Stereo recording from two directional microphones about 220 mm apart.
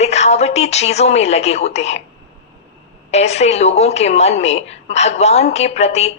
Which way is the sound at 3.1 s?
30° left (ahead or behind).